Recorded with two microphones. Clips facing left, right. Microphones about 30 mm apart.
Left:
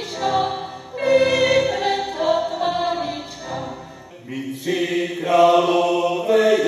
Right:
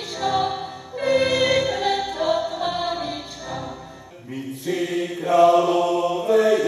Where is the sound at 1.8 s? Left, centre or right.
Centre.